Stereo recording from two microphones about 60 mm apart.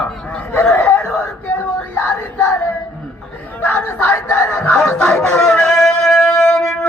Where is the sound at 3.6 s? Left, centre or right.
Left.